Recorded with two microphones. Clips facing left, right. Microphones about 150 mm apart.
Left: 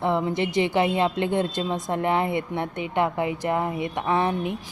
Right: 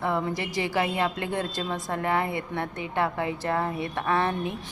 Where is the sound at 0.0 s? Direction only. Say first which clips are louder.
Left 4 dB; 20° left (ahead or behind).